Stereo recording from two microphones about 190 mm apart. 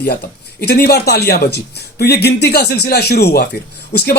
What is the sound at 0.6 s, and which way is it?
Speech, 60° left (ahead or behind).